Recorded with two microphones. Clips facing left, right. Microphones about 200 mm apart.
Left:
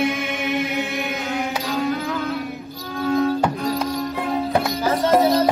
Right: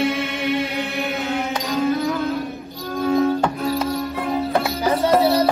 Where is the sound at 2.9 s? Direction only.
Centre (ahead or behind).